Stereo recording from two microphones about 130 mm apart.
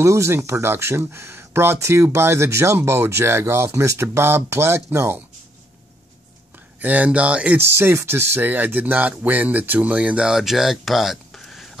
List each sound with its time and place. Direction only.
0.0 s speech: 20° right (ahead or behind)
6.8 s speech: 10° right (ahead or behind)